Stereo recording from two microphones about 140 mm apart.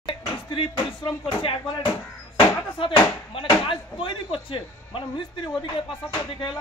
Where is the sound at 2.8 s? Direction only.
40° left (ahead or behind).